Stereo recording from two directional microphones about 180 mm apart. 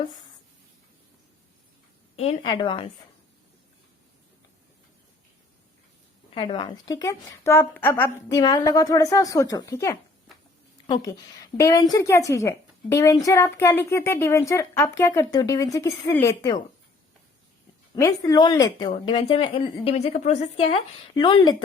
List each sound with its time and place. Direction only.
2.5 s a woman's voice: 25° left (ahead or behind)
6.3 s a woman's voice: 30° left (ahead or behind)
17.9 s a woman's voice: 20° left (ahead or behind)